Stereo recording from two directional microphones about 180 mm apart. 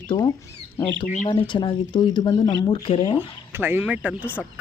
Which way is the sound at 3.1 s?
10° right (ahead or behind).